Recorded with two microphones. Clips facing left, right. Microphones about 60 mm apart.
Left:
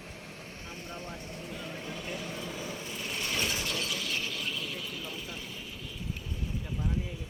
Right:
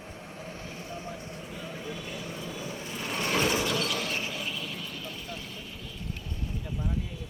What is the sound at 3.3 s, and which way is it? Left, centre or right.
Mechanisms, right.